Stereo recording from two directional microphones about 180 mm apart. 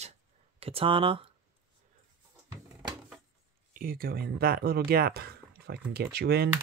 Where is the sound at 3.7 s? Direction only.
55° right (ahead or behind).